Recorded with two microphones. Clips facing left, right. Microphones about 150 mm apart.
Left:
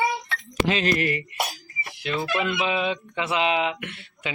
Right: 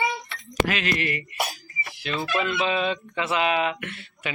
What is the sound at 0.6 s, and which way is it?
Speech, 35° left (ahead or behind).